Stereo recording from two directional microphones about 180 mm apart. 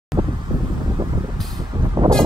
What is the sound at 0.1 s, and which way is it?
Wind, 25° right (ahead or behind).